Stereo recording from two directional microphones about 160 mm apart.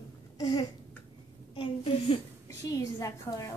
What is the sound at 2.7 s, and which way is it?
Speech, 20° left (ahead or behind).